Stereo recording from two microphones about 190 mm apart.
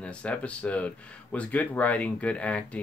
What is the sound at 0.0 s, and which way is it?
Speech, 5° left (ahead or behind).